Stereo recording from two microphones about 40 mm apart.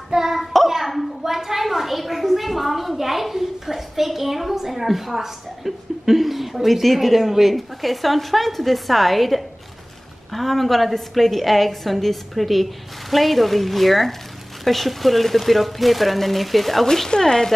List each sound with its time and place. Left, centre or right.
0.1 s hands: centre
0.4 s hands: centre
0.7 s a sound: centre
10.3 s a woman's voice: centre